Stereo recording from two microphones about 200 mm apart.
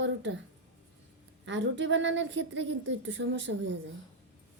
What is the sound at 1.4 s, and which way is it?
A woman's voice, 65° right (ahead or behind).